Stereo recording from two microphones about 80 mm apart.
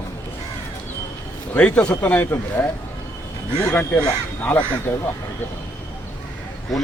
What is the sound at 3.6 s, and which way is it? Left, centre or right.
Speech, left.